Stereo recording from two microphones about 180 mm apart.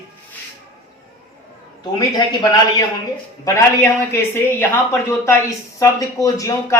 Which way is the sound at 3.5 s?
15° left (ahead or behind).